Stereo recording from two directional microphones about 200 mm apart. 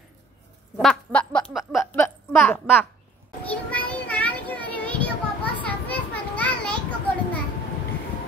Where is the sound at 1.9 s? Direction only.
10° left (ahead or behind).